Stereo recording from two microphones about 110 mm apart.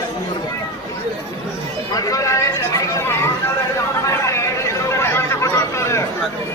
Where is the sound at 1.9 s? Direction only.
35° left (ahead or behind).